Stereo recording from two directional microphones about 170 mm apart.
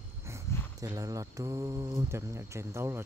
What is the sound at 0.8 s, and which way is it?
Speech, 20° right (ahead or behind).